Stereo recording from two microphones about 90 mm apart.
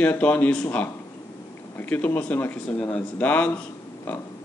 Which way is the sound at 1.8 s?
20° left (ahead or behind).